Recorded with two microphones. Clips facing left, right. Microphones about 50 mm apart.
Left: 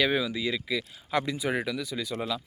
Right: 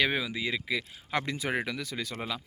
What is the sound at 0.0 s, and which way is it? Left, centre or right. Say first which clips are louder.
Speech: left 2 dB; right.